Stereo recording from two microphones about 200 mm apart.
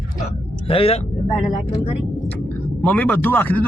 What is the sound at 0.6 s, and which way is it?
Speech, 30° left (ahead or behind).